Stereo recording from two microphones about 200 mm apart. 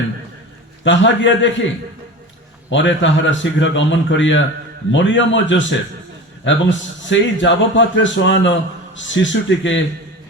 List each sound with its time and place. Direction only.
0.9 s a man's voice: 65° left (ahead or behind)